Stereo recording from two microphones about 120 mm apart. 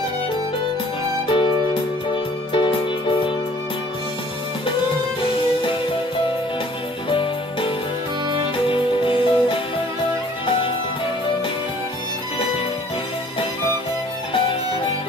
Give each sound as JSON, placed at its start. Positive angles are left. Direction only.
{"t": 1.3, "sound": "music", "side_deg": 45}
{"t": 8.6, "sound": "music", "side_deg": 45}